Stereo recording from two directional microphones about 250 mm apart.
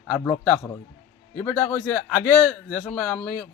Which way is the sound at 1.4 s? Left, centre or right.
Centre.